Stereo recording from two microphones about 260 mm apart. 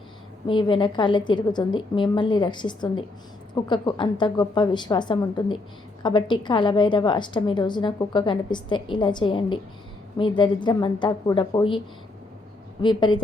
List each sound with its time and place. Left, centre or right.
0.4 s a woman's voice: centre
12.8 s a woman's voice: centre